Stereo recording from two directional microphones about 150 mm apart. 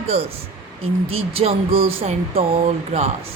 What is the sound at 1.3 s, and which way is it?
A woman's voice, 40° right (ahead or behind).